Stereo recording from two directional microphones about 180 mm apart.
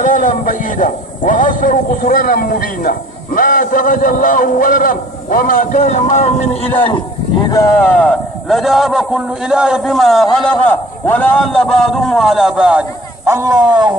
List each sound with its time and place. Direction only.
0.0 s a man's voice: 45° left (ahead or behind)
7.4 s a man's voice: 20° left (ahead or behind); by 12.8 s 5° right (ahead or behind)
13.2 s speech: 15° right (ahead or behind)